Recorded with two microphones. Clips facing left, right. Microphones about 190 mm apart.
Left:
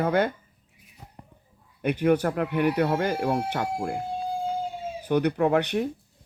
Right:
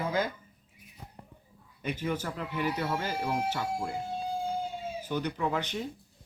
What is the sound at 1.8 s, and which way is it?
Speech, 65° left (ahead or behind).